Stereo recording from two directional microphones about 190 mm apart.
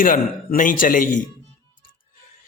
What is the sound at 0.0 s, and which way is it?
Speech, 45° left (ahead or behind).